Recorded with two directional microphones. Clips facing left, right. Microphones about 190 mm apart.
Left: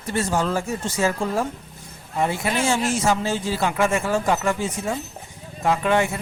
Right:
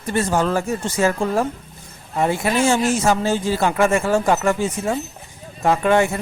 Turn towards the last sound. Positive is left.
turn(degrees=-45)  # may be behind; listen again after turning